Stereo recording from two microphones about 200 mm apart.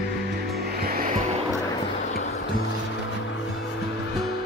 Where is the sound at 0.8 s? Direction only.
45° right (ahead or behind).